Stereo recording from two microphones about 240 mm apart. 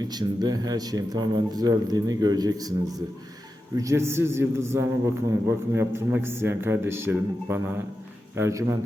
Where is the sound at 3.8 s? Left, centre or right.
Centre.